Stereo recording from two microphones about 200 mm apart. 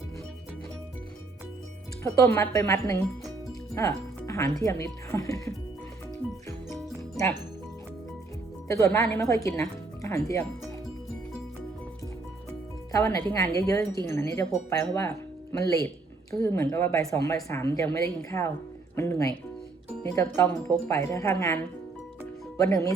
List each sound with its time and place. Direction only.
2.0 s speech: 10° left (ahead or behind)
8.6 s speech: 15° left (ahead or behind)
12.9 s speech: 15° left (ahead or behind)